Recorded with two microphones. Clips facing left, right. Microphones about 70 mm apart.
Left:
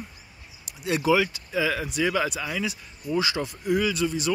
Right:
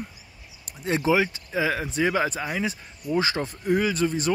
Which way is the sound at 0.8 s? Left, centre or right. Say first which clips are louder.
Even; right.